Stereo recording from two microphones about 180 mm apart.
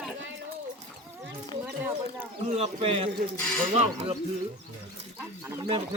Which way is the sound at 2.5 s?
35° right (ahead or behind).